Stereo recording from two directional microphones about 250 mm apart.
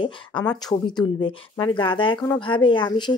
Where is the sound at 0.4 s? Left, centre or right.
Centre.